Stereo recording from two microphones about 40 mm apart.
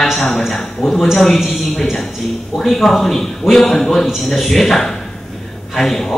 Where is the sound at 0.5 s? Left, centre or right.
Centre.